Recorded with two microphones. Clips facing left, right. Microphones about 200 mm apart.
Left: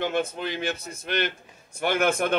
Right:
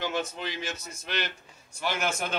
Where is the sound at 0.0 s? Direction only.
55° left (ahead or behind).